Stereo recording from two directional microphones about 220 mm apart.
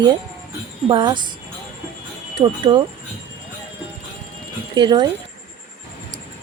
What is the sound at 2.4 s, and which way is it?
Speech, 20° right (ahead or behind).